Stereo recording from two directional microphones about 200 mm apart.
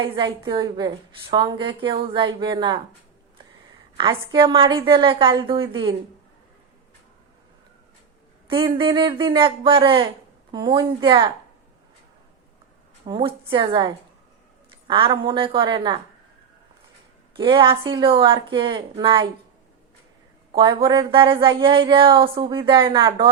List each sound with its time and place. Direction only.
0.0 s a woman's voice: 25° right (ahead or behind)
3.9 s a woman's voice: 25° right (ahead or behind)
8.4 s a woman's voice: 25° right (ahead or behind)
13.1 s a woman's voice: 25° right (ahead or behind)
17.3 s a woman's voice: 25° right (ahead or behind)
20.5 s a woman's voice: 25° right (ahead or behind)